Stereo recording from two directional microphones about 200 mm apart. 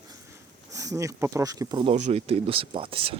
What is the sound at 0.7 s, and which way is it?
Speech, 15° right (ahead or behind).